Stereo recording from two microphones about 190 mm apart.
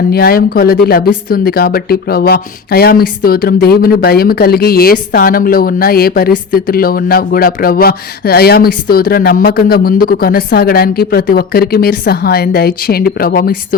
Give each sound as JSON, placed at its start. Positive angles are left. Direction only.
{"t": 0.1, "sound": "speech", "side_deg": 55}